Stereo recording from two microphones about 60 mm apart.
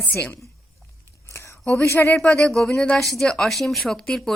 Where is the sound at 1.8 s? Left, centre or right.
Left.